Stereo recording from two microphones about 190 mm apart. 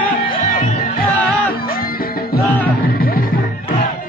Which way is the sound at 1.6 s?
50° left (ahead or behind).